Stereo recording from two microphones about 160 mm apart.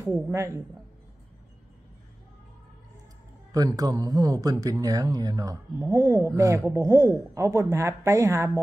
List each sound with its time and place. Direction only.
0.1 s speech: 15° right (ahead or behind)
3.5 s speech: 25° right (ahead or behind)